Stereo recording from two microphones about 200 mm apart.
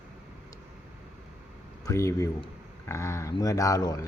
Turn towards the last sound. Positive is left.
turn(degrees=20)  # may be behind; listen again after turning